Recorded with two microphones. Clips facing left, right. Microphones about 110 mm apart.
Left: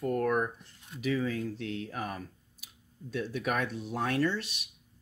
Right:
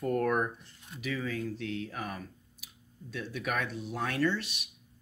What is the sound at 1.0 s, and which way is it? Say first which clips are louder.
Speech: left 4 dB; 25° left (ahead or behind).